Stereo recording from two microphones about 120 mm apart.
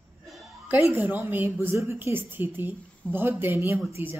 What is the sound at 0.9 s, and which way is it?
A woman's voice, 20° right (ahead or behind).